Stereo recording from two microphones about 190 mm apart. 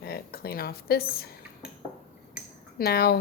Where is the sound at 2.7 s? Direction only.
55° left (ahead or behind).